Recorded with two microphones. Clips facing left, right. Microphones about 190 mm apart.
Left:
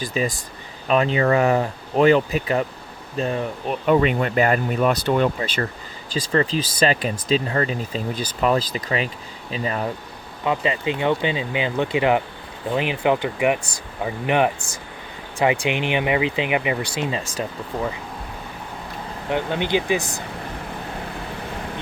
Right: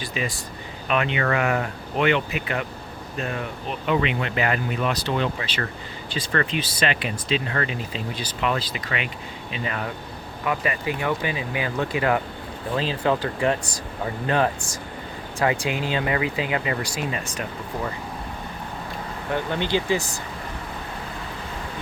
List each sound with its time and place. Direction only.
0.0 s speech: 40° left (ahead or behind)
3.7 s speech: 45° left (ahead or behind)
6.2 s speech: 35° left (ahead or behind)
10.4 s speech: 25° left (ahead or behind)
19.3 s speech: 15° left (ahead or behind)